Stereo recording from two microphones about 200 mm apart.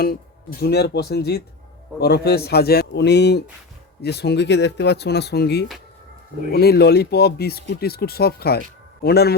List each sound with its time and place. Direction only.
0.6 s speech: 55° left (ahead or behind)